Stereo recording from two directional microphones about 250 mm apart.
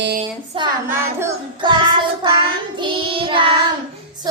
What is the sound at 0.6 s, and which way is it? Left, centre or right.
Child singing, centre.